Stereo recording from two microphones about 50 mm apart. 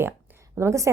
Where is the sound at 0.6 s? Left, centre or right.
Right.